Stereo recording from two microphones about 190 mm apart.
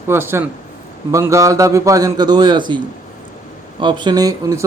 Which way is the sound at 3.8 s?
25° right (ahead or behind).